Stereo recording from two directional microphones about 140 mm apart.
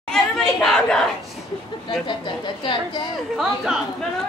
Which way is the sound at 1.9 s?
35° left (ahead or behind).